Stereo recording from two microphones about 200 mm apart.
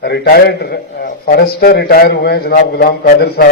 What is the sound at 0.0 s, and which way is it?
A man's voice, 50° left (ahead or behind).